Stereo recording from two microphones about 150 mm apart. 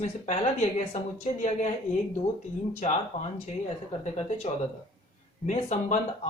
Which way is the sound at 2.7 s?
50° left (ahead or behind).